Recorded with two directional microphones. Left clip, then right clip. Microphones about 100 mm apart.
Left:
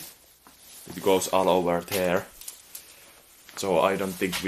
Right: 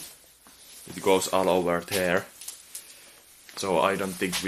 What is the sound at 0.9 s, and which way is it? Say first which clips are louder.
Speech: even; centre (ahead or behind).